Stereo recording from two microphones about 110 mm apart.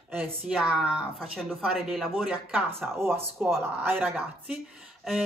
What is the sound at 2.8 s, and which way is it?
Speech, 20° right (ahead or behind).